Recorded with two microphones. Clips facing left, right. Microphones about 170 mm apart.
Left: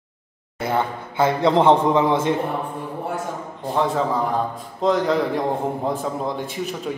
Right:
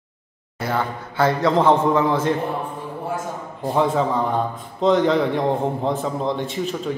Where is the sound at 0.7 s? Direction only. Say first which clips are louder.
Left 1 dB; 15° left (ahead or behind).